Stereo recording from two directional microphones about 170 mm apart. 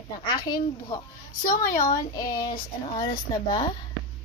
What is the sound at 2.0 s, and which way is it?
Speech, 20° left (ahead or behind).